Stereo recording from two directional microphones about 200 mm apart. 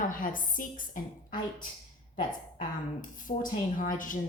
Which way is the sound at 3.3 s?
40° left (ahead or behind).